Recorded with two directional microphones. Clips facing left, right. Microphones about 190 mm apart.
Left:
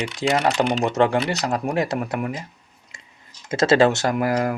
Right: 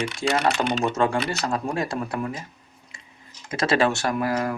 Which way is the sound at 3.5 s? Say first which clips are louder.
Left 5 dB; 25° left (ahead or behind).